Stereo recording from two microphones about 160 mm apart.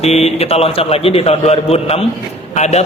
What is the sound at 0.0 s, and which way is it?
Mantra, 40° left (ahead or behind).